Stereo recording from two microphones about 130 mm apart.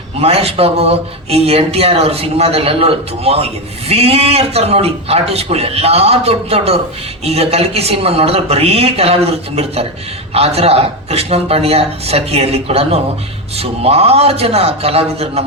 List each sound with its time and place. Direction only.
0.2 s a man's voice: 50° right (ahead or behind)